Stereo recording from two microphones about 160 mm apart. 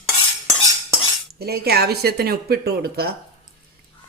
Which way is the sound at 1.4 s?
80° right.